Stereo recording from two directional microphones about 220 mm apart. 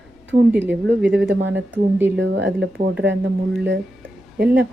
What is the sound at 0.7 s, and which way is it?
Speech, 55° right (ahead or behind).